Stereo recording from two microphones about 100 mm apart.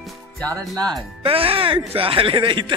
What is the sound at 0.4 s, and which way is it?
Speech, 10° left (ahead or behind).